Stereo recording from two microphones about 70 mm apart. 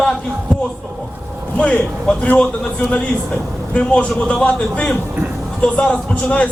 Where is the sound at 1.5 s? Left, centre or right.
Centre.